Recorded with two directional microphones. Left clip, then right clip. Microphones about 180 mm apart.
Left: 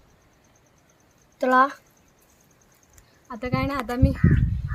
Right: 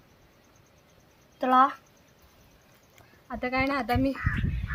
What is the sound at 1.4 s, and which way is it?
Speech, 70° left (ahead or behind).